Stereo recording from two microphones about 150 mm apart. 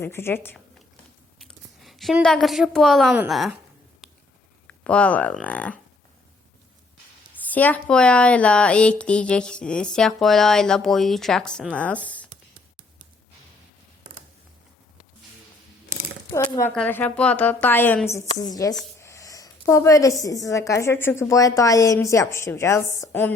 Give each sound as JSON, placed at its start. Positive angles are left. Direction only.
{"t": 0.0, "sound": "speech", "side_deg": 15}
{"t": 1.4, "sound": "a woman's voice", "side_deg": 0}
{"t": 4.6, "sound": "speech", "side_deg": 10}
{"t": 7.5, "sound": "speech", "side_deg": 10}
{"t": 16.3, "sound": "speech", "side_deg": 20}
{"t": 18.1, "sound": "a woman's voice", "side_deg": 25}